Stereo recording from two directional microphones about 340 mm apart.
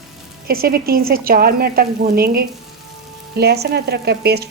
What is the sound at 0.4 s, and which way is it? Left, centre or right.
Speech, right.